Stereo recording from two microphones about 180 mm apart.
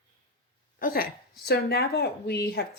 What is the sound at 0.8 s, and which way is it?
Speech, 55° left (ahead or behind).